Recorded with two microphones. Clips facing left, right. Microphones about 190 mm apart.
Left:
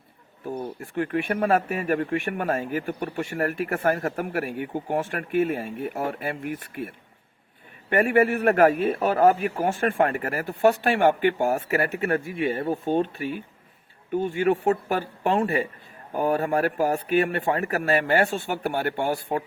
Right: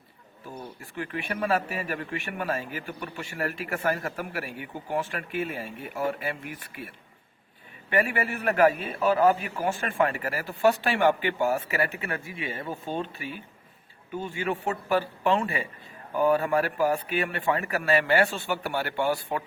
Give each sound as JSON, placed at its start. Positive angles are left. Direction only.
{"t": 0.4, "sound": "speech", "side_deg": 50}